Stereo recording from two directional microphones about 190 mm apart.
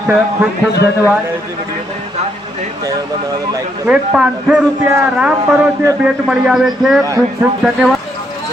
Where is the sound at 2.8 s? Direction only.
20° right (ahead or behind).